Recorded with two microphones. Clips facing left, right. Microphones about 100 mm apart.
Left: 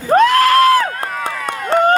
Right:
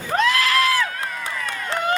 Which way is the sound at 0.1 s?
50° left (ahead or behind).